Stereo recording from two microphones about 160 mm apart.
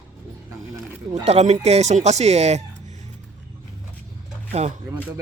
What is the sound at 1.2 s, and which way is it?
Speech, 40° right (ahead or behind).